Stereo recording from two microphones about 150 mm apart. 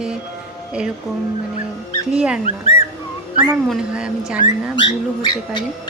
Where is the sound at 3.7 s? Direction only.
5° right (ahead or behind).